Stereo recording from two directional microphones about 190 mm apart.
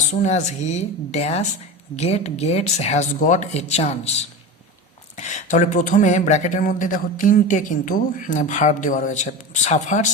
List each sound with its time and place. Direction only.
0.0 s speech: 40° left (ahead or behind)